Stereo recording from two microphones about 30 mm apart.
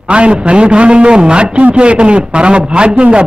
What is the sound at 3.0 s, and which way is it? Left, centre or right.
Speech, right.